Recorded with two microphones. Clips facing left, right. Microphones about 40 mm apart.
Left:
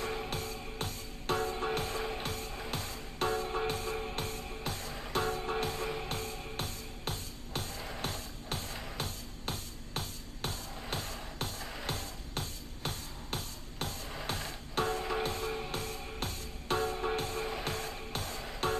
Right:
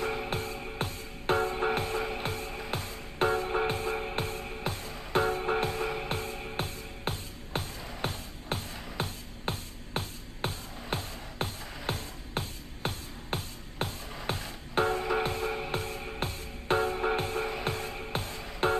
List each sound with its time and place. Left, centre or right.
0.0 s music: right